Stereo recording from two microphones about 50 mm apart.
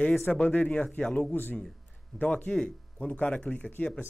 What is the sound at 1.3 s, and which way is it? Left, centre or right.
Speech, left.